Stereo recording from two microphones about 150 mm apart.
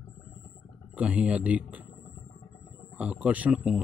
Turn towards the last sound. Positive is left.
turn(degrees=-10)  # may be behind; listen again after turning